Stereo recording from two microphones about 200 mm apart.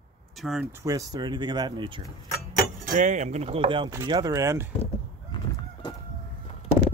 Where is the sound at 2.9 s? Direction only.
40° right (ahead or behind); by 4.6 s 15° right (ahead or behind).